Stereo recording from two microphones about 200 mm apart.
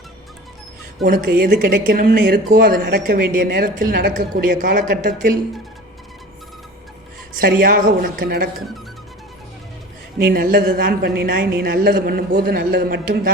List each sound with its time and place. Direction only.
1.0 s speech: 45° right (ahead or behind)
7.4 s speech: 45° right (ahead or behind)
10.2 s speech: 45° right (ahead or behind)